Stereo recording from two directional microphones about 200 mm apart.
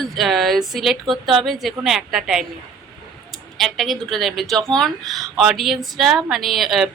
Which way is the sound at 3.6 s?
Centre (ahead or behind).